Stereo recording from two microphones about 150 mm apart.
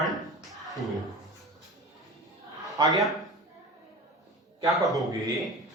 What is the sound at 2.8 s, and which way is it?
Speech, 30° right (ahead or behind).